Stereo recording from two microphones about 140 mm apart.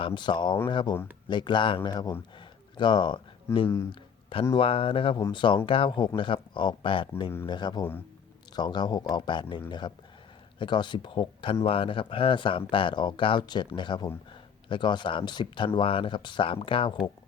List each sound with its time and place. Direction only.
0.0 s speech: 35° left (ahead or behind)